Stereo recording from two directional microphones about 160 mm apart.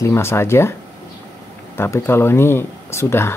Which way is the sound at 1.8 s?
15° left (ahead or behind).